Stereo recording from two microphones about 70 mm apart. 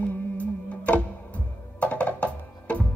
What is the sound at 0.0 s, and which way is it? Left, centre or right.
Music, left.